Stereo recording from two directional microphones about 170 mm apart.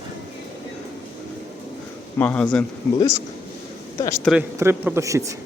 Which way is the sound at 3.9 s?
20° left (ahead or behind).